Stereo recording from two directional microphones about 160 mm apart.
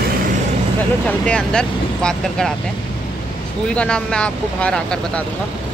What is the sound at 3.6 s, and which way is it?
Speech, 5° left (ahead or behind).